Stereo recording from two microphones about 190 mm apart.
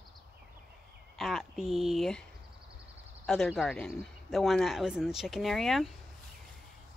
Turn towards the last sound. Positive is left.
turn(degrees=0)  # may be behind; listen again after turning